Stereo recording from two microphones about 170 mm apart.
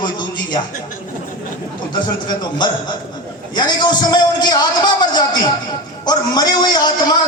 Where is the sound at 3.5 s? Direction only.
25° left (ahead or behind).